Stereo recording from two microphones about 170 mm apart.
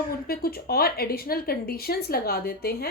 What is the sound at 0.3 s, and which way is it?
A child's voice, 60° left (ahead or behind).